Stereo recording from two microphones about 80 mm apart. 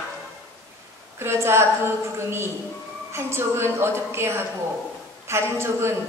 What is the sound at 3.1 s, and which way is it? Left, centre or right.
A woman's voice, right.